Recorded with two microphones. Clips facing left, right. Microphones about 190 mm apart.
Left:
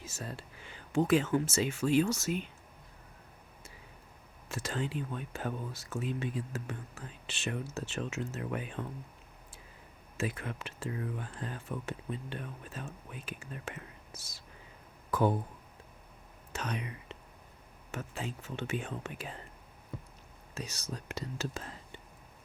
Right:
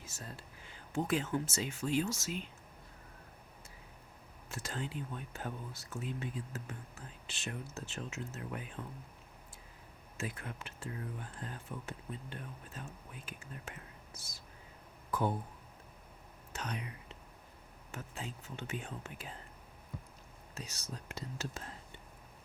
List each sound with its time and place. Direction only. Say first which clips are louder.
0.0 s speech: left 6 dB; 90° left; by 2.4 s 60° left (ahead or behind)
4.4 s speech: left 5 dB; 90° left
10.2 s speech: left 6 dB; 90° left
16.5 s speech: left 4 dB; 90° left
17.9 s speech: left 6 dB; 75° left (ahead or behind)
20.6 s speech: left 5 dB; 80° left